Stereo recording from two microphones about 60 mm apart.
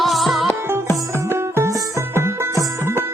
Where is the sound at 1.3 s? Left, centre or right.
Right.